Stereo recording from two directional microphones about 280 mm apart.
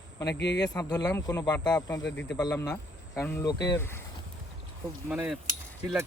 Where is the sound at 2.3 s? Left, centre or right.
Centre.